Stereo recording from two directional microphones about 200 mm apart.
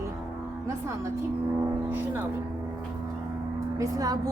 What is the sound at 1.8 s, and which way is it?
Music, 10° right (ahead or behind).